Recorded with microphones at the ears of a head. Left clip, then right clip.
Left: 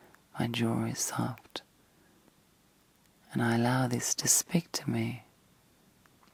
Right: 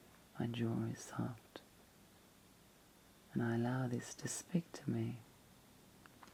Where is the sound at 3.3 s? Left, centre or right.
Left.